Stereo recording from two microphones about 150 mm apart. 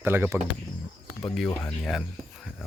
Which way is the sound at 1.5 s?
10° left (ahead or behind).